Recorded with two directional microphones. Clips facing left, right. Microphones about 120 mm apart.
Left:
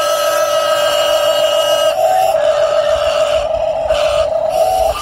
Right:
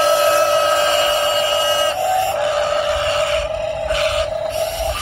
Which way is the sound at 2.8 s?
25° left (ahead or behind).